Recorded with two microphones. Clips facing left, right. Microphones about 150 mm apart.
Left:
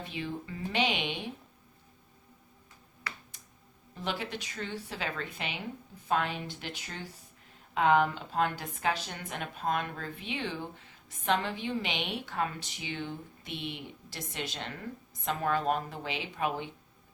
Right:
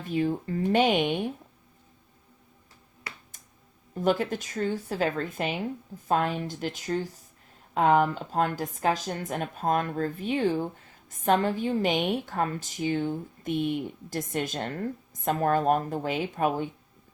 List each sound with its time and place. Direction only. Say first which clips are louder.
0.0 s a woman's voice: right 10 dB; 45° right (ahead or behind)
3.3 s finger snapping: right 1 dB; 45° right (ahead or behind)
3.9 s a woman's voice: right 10 dB; 45° right (ahead or behind)